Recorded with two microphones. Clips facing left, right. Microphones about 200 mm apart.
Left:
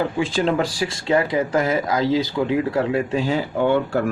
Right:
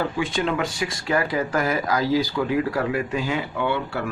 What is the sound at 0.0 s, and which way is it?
Speech, 30° left (ahead or behind).